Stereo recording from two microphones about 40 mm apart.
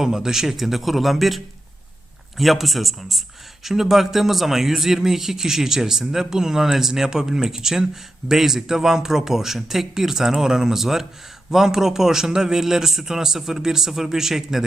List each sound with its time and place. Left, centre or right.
0.0 s a man's voice: centre
2.4 s speech: centre